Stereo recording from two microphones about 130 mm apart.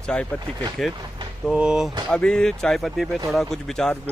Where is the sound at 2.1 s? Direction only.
5° left (ahead or behind).